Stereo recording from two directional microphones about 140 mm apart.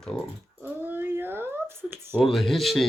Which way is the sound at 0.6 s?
15° right (ahead or behind).